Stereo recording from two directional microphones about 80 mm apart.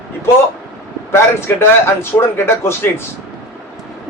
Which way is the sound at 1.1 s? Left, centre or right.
Left.